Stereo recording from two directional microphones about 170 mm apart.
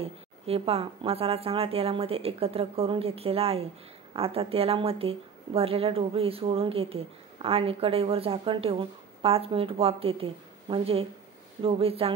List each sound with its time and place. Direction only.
0.0 s a woman's voice: 35° right (ahead or behind)